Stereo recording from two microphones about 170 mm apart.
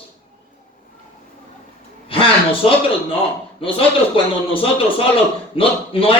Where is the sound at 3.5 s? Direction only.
30° left (ahead or behind).